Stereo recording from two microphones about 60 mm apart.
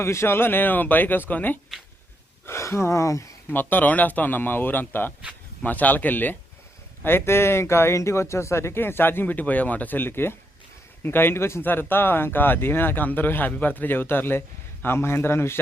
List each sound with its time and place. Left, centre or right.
0.0 s speech: left
2.5 s speech: left
3.5 s speech: left
11.6 s speech: left